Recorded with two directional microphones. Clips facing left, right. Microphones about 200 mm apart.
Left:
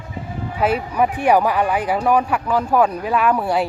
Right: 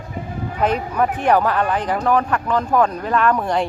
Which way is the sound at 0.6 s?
5° left (ahead or behind).